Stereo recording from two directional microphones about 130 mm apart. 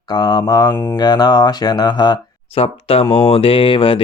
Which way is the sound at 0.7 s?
15° left (ahead or behind).